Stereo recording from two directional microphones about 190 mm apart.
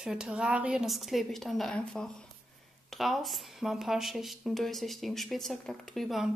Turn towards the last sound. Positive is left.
turn(degrees=0)  # may be behind; listen again after turning